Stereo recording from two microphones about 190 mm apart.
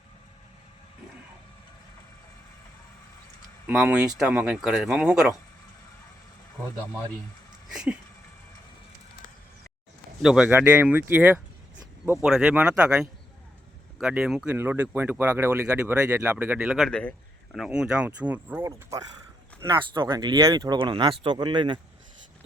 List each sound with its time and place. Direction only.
3.7 s speech: 5° right (ahead or behind)
7.7 s speech: 5° right (ahead or behind)
10.2 s speech: 5° right (ahead or behind); by 21.8 s 25° right (ahead or behind)